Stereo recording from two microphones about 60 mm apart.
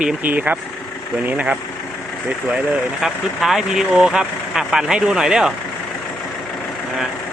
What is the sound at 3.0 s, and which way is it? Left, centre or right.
Speech, centre.